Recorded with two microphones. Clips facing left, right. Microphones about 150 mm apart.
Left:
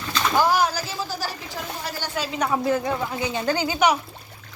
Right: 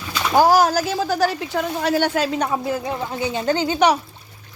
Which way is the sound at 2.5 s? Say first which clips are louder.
Left 1 dB; 20° right (ahead or behind).